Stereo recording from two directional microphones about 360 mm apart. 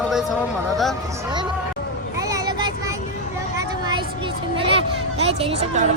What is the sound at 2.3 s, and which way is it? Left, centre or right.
Child singing, centre.